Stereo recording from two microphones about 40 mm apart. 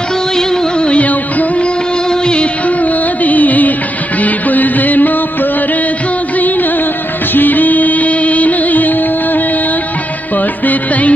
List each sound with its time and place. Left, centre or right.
0.4 s music: left
1.6 s music of bollywood: left
2.8 s music: left
7.3 s music: left